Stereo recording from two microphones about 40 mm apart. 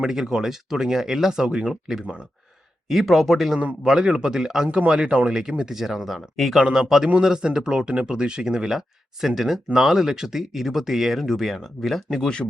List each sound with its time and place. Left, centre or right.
0.0 s speech: centre
1.5 s speech: right
1.7 s speech: centre
3.8 s speech: centre
6.6 s speech: centre